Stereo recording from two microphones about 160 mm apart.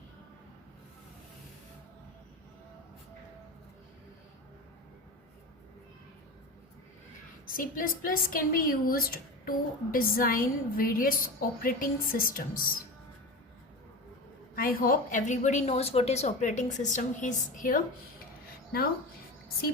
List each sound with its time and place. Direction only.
7.4 s a woman's voice: 60° left (ahead or behind)
14.5 s a woman's voice: 65° left (ahead or behind)